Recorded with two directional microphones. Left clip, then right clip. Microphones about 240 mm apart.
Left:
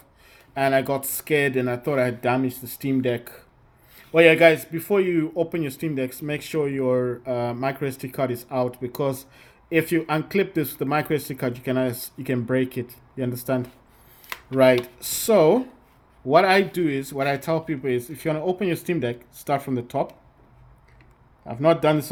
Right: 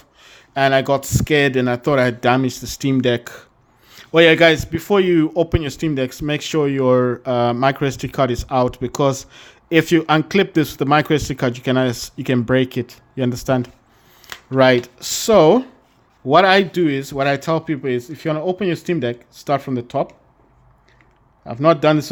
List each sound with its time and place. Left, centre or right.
0.2 s speech: right
21.4 s speech: right